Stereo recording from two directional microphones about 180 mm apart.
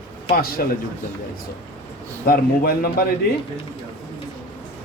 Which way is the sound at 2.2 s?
55° left (ahead or behind).